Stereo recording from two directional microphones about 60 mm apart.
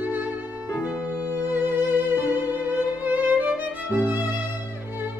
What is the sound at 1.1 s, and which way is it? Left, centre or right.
Music, left.